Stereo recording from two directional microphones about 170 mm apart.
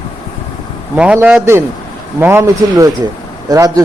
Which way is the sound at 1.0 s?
5° right (ahead or behind).